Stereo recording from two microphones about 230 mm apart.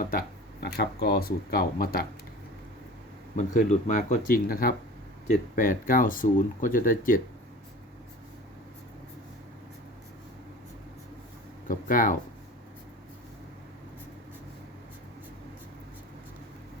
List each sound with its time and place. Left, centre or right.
0.0 s speech: left
3.3 s speech: left
11.7 s speech: left